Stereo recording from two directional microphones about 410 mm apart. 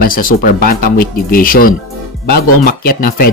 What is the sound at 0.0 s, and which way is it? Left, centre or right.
Speech, centre.